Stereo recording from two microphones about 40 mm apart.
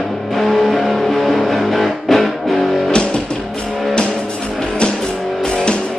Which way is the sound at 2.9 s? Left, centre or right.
Left.